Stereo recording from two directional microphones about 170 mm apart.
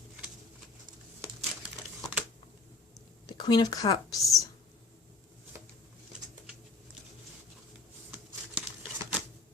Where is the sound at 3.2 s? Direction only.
25° left (ahead or behind).